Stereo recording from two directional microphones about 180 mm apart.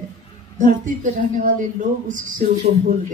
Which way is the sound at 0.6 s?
45° right (ahead or behind).